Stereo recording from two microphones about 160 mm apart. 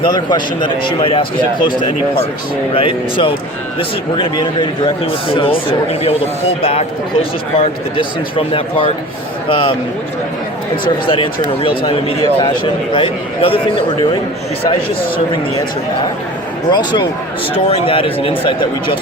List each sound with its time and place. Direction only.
0.0 s a man's voice: 30° left (ahead or behind)
2.7 s a man's voice: 35° left (ahead or behind)
10.8 s a man's voice: 30° left (ahead or behind)
16.6 s a man's voice: 25° left (ahead or behind)